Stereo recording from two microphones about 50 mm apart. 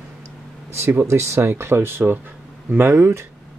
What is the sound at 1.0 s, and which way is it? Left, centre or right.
Speech, right.